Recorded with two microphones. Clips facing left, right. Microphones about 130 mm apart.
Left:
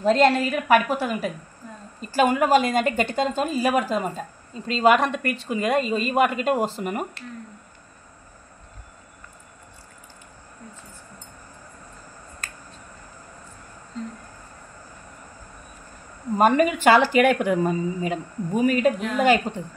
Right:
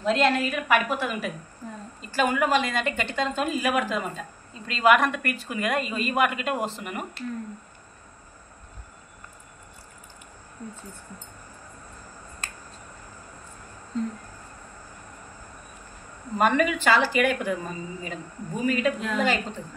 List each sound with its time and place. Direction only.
0.0 s a woman's voice: 40° left (ahead or behind)
16.3 s a woman's voice: 45° left (ahead or behind); by 18.8 s 70° left (ahead or behind)
18.8 s a woman's voice: 50° left (ahead or behind)